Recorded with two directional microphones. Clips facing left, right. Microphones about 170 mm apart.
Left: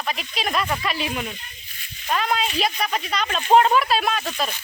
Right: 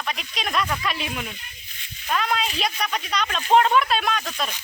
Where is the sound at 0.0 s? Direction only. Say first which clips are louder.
Left 3 dB; centre (ahead or behind).